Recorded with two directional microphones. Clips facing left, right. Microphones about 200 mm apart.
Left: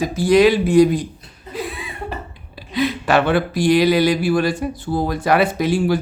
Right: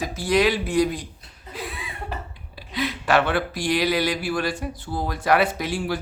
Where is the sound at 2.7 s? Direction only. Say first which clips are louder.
Left 4 dB; 20° left (ahead or behind).